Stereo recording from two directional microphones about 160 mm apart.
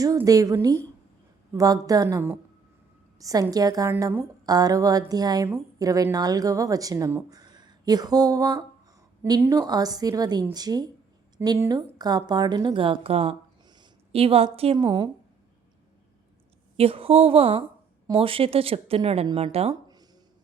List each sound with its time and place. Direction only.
0.0 s a woman's voice: 20° right (ahead or behind); by 14.8 s 35° right (ahead or behind)
14.8 s a woman's voice: 25° right (ahead or behind)
16.7 s speech: 35° right (ahead or behind)